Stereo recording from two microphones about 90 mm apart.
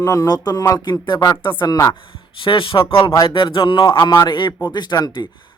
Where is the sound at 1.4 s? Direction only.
60° left (ahead or behind).